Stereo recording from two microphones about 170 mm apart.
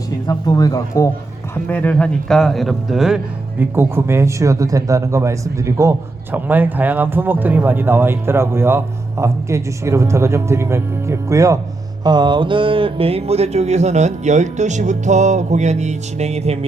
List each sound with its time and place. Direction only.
0.3 s speech: 20° left (ahead or behind)
1.6 s speech: 10° left (ahead or behind)
3.6 s speech: 15° right (ahead or behind); by 16.6 s 40° right (ahead or behind)